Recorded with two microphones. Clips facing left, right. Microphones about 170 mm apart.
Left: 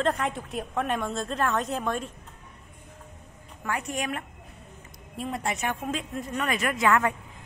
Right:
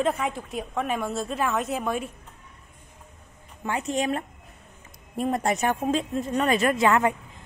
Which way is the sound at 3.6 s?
25° right (ahead or behind).